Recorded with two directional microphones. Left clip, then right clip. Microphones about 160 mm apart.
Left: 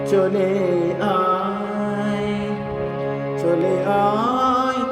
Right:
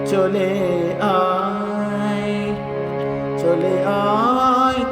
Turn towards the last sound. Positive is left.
turn(degrees=-25)  # may be behind; listen again after turning